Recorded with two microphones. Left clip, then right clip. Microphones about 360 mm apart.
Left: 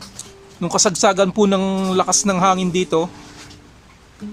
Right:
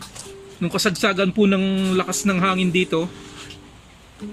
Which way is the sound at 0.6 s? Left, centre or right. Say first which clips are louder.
Left 4 dB; left.